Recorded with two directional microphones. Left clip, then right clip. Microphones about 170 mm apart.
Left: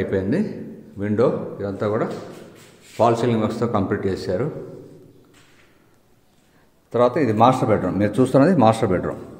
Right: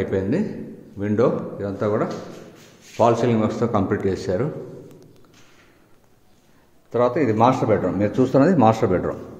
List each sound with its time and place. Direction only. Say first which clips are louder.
0.0 s a man's voice: even; centre (ahead or behind)
6.9 s a man's voice: left 1 dB; 10° left (ahead or behind)